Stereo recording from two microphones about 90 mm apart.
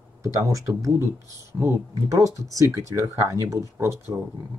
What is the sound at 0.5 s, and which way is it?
Speech, 35° right (ahead or behind).